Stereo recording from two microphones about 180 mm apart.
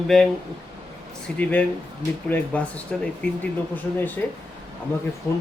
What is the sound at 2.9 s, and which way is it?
Speech, 5° left (ahead or behind).